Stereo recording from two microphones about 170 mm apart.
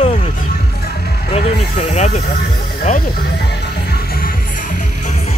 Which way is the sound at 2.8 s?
60° left (ahead or behind).